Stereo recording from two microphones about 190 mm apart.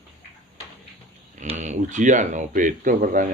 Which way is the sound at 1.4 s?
40° right (ahead or behind).